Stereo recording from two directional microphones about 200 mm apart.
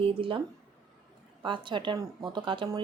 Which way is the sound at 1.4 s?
25° right (ahead or behind).